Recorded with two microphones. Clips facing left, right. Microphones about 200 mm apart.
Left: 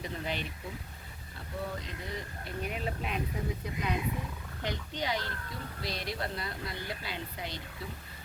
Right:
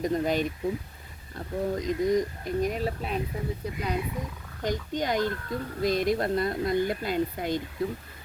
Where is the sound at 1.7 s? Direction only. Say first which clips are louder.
Right 15 dB; 40° right (ahead or behind).